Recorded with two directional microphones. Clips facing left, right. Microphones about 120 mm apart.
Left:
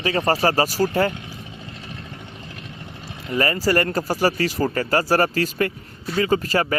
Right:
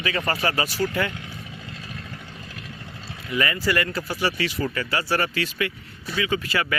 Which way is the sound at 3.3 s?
35° left (ahead or behind).